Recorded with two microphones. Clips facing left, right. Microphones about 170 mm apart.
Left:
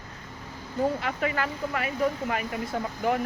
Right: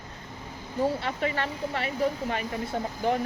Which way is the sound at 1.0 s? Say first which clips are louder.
Left 1 dB; 30° right (ahead or behind).